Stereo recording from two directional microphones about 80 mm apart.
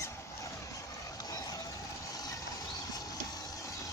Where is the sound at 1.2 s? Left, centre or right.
Left.